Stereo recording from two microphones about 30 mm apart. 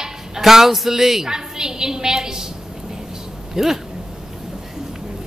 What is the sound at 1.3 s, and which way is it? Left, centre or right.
A woman's voice, right.